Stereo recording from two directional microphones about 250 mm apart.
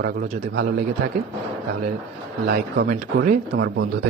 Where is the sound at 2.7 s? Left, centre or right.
Right.